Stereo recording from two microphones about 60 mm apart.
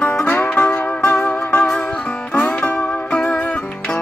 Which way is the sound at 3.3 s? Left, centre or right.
Left.